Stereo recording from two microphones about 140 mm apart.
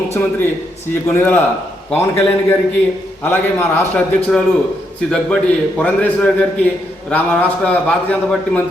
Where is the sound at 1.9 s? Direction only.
15° left (ahead or behind).